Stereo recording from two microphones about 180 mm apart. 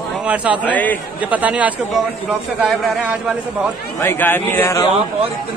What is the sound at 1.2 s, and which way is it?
Speech, 10° right (ahead or behind).